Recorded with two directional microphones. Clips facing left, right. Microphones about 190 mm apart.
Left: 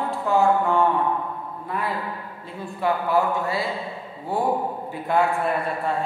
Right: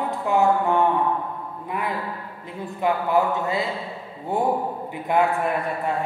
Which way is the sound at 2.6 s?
20° right (ahead or behind).